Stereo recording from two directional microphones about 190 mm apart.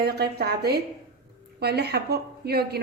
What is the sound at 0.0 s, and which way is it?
A woman's voice, 55° right (ahead or behind).